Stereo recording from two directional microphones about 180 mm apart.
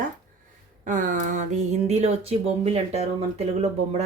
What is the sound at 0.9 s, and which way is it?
Speech, 45° right (ahead or behind).